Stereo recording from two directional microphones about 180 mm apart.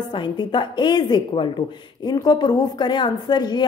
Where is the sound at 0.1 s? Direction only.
25° left (ahead or behind).